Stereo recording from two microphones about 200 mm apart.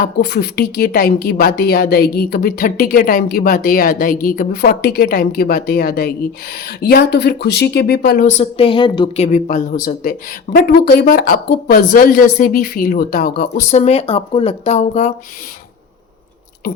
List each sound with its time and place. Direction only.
0.0 s a woman's voice: 55° left (ahead or behind)
8.3 s a woman's voice: 30° left (ahead or behind)